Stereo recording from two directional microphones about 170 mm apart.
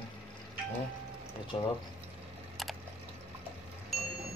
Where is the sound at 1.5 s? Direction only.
30° left (ahead or behind).